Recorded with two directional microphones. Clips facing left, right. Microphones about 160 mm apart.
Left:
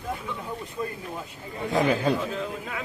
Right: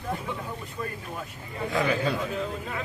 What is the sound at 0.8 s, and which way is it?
Speech, 20° left (ahead or behind).